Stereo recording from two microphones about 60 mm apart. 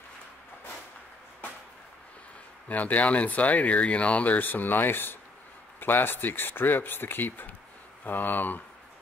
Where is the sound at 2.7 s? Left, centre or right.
Left.